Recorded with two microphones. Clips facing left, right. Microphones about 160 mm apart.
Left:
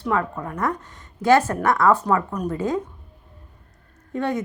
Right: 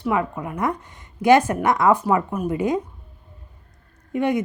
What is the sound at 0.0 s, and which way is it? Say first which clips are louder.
A woman's voice: right 1 dB; 10° right (ahead or behind).